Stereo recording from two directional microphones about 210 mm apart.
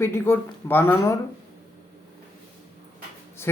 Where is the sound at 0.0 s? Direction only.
10° left (ahead or behind).